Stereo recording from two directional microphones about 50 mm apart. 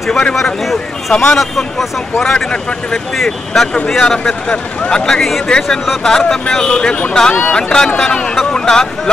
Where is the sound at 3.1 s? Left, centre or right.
Centre.